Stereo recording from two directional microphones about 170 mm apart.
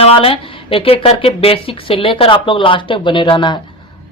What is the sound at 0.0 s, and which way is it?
Speech, 35° left (ahead or behind).